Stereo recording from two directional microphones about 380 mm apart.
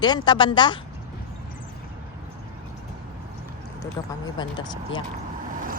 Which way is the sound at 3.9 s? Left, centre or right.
Centre.